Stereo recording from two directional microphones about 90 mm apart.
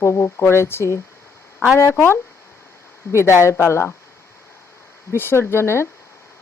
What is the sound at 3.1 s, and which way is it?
Speech, 30° left (ahead or behind).